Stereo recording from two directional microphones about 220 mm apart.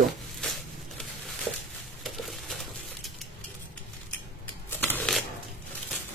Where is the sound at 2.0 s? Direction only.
Centre (ahead or behind).